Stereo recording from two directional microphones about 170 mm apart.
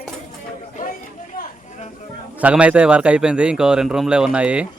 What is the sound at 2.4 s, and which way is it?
Speech, 5° right (ahead or behind).